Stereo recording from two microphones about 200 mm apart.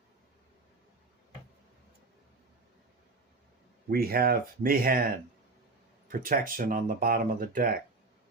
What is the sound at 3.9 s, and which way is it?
Speech, 50° right (ahead or behind).